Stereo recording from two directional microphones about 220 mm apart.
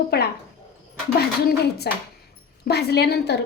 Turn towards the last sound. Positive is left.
turn(degrees=50)  # may be behind; listen again after turning